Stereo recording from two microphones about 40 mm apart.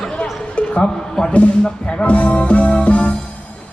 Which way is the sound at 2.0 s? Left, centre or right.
Left.